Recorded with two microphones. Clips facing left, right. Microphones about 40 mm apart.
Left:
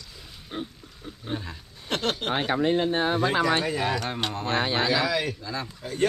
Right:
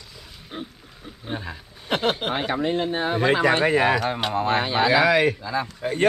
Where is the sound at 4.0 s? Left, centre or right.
Centre.